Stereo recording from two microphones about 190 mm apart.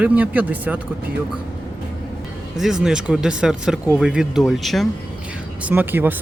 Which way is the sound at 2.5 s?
Centre (ahead or behind).